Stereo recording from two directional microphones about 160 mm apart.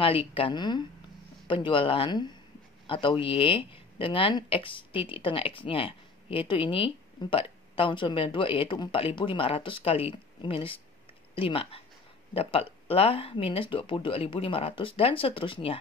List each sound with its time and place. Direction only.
0.0 s speech: 35° left (ahead or behind)